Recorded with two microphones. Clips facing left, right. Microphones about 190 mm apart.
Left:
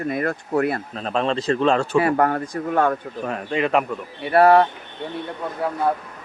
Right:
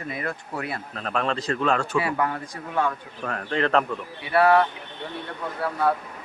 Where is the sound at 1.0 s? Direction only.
25° left (ahead or behind).